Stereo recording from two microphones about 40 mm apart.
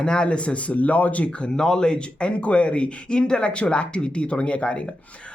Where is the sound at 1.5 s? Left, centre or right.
Centre.